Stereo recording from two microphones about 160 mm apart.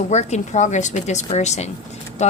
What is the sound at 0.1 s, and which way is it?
A woman's voice, 45° left (ahead or behind).